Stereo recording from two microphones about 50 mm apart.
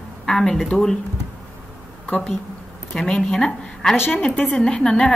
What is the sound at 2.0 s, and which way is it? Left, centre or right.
Speech, left.